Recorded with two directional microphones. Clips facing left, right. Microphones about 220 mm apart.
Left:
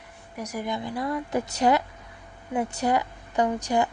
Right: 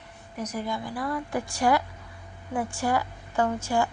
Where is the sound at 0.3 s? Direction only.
10° left (ahead or behind).